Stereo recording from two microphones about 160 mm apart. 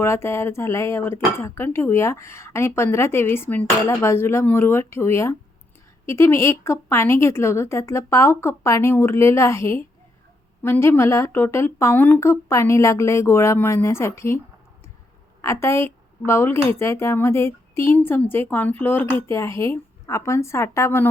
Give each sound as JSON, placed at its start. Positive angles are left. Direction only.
{"t": 0.0, "sound": "speech", "side_deg": 15}